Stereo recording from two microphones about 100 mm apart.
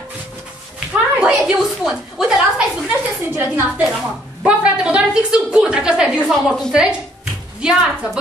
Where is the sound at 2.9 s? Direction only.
25° right (ahead or behind).